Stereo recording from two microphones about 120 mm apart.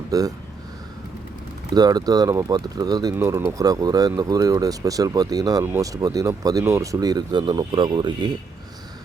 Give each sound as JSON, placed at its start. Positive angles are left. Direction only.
{"t": 0.1, "sound": "speech", "side_deg": -30}
{"t": 1.7, "sound": "speech", "side_deg": -35}